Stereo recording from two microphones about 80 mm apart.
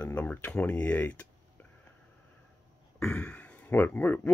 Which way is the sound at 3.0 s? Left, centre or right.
Centre.